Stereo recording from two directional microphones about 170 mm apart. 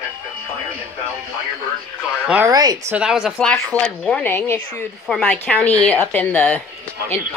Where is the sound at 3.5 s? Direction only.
10° left (ahead or behind).